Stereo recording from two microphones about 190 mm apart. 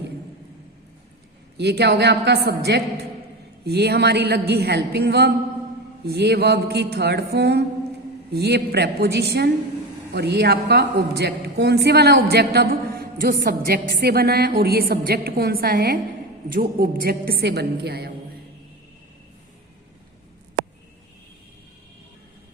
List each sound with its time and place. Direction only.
1.5 s a woman's voice: 60° right (ahead or behind)